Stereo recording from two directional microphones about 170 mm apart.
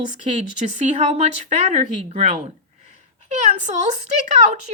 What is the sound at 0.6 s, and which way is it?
Speech, 40° right (ahead or behind).